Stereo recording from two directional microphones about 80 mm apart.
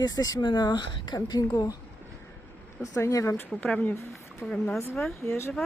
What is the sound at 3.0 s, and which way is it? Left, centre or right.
Speech, left.